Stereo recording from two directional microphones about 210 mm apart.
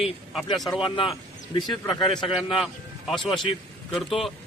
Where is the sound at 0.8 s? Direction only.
25° left (ahead or behind).